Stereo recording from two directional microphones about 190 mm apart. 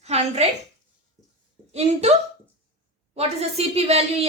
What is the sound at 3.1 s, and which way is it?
A woman's voice, 35° right (ahead or behind).